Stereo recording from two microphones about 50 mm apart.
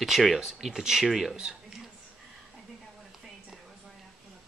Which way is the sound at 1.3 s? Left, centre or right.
Centre.